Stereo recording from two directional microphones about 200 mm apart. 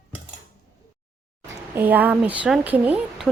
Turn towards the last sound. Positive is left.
turn(degrees=-5)  # may be behind; listen again after turning